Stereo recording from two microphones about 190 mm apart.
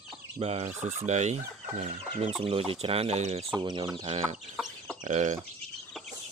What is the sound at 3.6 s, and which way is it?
Speech, 20° right (ahead or behind).